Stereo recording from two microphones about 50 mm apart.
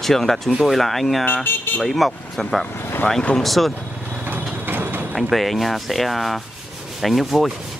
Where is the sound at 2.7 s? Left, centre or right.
Left.